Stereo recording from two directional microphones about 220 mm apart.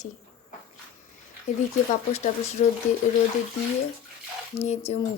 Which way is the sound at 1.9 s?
30° left (ahead or behind).